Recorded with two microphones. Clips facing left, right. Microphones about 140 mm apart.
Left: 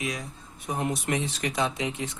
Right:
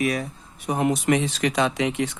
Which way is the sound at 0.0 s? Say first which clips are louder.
Right 9 dB; 60° right (ahead or behind).